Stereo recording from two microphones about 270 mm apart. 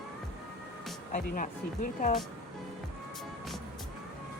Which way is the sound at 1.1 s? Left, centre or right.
Left.